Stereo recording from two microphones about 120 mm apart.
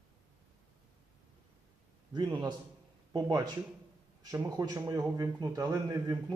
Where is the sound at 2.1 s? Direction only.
40° right (ahead or behind).